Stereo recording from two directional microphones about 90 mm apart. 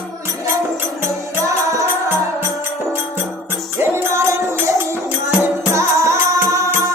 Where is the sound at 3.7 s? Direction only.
30° right (ahead or behind).